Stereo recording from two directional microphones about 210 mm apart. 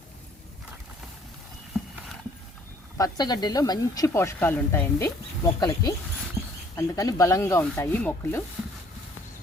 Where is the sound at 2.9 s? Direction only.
20° left (ahead or behind).